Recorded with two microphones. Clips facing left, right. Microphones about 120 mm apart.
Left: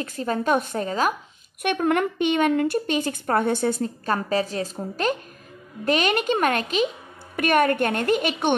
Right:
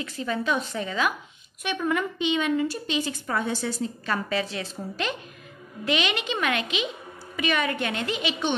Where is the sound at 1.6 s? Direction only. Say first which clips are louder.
Left 5 dB; 60° left (ahead or behind); by 4.8 s 40° left (ahead or behind).